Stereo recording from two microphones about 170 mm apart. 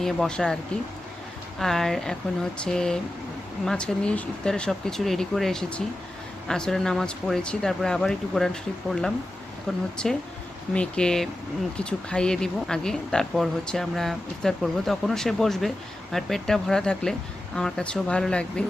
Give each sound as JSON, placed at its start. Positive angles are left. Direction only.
{"t": 0.0, "sound": "speech", "side_deg": 5}